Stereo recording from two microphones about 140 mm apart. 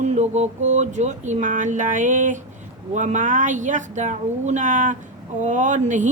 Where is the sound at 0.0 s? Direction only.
55° right (ahead or behind).